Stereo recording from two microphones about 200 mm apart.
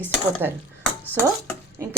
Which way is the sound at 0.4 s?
10° right (ahead or behind).